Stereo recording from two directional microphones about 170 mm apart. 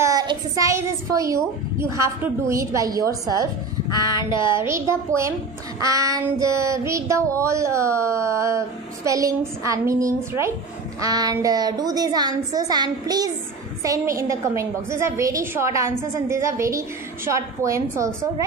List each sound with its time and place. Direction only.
0.0 s a child's voice: 20° right (ahead or behind)
4.1 s child singing: 25° left (ahead or behind)
4.6 s a woman's voice: 15° right (ahead or behind)